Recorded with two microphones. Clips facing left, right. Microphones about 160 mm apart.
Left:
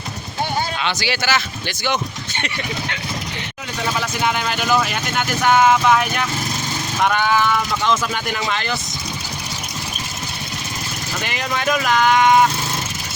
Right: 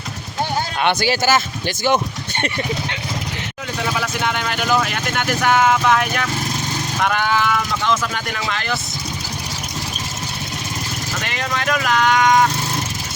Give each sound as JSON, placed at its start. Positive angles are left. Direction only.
{"t": 0.8, "sound": "speech", "side_deg": -55}
{"t": 1.1, "sound": "speech", "side_deg": -40}
{"t": 4.0, "sound": "speech", "side_deg": 5}
{"t": 11.3, "sound": "speech", "side_deg": 5}